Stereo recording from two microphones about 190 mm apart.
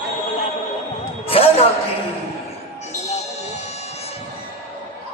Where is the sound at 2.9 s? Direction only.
35° left (ahead or behind).